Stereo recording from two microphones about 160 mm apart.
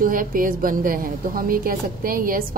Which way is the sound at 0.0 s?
60° right (ahead or behind).